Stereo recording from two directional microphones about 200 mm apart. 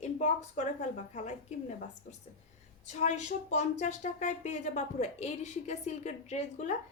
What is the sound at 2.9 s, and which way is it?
Speech, 35° left (ahead or behind).